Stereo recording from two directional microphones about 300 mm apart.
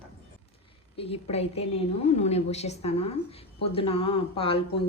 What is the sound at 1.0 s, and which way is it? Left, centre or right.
A woman's voice, centre.